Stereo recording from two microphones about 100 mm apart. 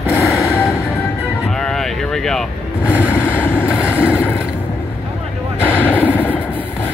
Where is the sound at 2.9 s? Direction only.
15° right (ahead or behind).